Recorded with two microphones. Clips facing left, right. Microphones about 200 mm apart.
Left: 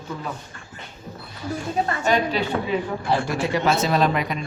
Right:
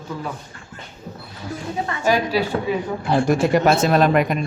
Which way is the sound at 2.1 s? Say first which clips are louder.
Right 4 dB; 5° right (ahead or behind).